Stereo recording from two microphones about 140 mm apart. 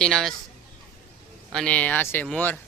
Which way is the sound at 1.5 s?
5° left (ahead or behind).